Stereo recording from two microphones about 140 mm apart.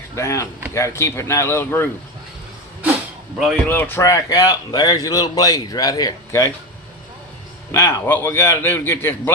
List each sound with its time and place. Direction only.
0.2 s a man's voice: 20° left (ahead or behind)
3.7 s a man's voice: 15° left (ahead or behind)
7.7 s a man's voice: 20° left (ahead or behind)